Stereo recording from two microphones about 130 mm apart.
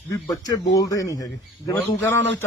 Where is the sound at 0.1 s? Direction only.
25° left (ahead or behind).